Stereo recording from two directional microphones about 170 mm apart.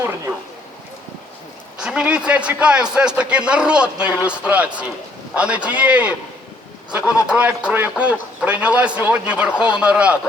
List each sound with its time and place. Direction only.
1.8 s a man's voice: 5° right (ahead or behind)